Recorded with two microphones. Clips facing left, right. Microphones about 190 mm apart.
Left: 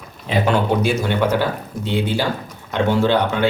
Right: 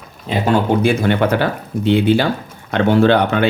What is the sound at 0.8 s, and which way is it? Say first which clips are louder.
Speech: right 4 dB; 60° right (ahead or behind).